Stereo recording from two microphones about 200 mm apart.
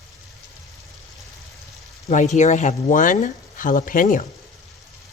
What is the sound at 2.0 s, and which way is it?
Speech, 35° left (ahead or behind).